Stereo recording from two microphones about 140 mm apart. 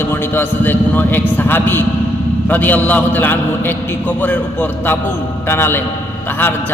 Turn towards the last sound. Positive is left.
turn(degrees=15)  # may be behind; listen again after turning